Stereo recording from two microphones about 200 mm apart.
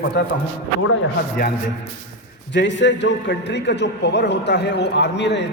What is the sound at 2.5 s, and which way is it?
A man's voice, 65° left (ahead or behind).